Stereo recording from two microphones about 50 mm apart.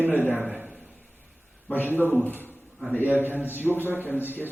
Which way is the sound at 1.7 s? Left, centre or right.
Left.